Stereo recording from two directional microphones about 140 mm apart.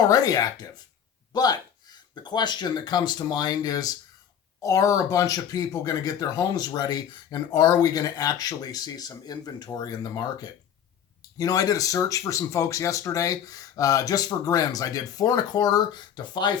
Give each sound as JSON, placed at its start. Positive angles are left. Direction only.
{"t": 0.1, "sound": "speech", "side_deg": 25}